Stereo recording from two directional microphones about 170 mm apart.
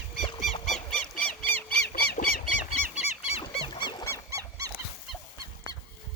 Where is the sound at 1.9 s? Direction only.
70° left (ahead or behind).